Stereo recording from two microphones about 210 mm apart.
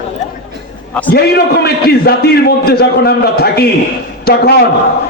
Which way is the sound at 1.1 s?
50° left (ahead or behind).